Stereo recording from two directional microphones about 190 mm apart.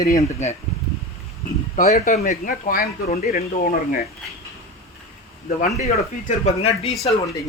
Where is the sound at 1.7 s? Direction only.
35° left (ahead or behind).